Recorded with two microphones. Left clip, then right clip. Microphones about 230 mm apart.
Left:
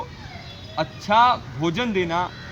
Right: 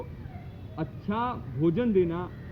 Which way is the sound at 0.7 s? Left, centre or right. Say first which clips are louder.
Left 14 dB; left.